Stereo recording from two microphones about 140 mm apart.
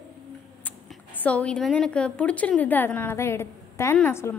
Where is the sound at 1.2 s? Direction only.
10° left (ahead or behind).